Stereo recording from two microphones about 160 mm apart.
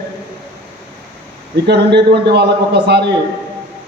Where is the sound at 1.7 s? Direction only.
90° right.